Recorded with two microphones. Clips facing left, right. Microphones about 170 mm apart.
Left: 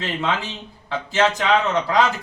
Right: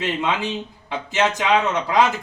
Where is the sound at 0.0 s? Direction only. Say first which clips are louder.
Right 2 dB; 15° right (ahead or behind).